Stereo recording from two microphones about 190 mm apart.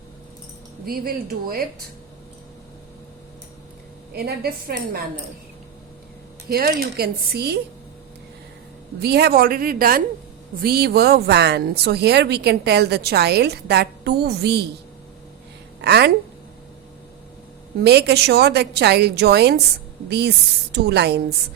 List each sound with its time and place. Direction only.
0.9 s speech: 50° right (ahead or behind)
4.1 s speech: 55° right (ahead or behind)
6.5 s speech: 55° right (ahead or behind)
9.0 s speech: 55° right (ahead or behind)
15.8 s speech: 60° right (ahead or behind)
17.8 s speech: 60° right (ahead or behind)